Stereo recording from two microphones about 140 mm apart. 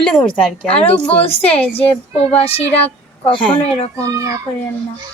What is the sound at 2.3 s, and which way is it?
Speech, 45° left (ahead or behind).